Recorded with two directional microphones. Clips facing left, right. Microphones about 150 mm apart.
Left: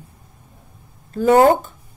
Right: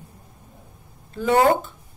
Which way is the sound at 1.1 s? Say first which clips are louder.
Left 6 dB; 45° left (ahead or behind).